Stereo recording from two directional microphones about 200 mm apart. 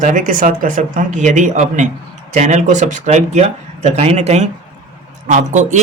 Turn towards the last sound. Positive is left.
turn(degrees=-35)  # may be behind; listen again after turning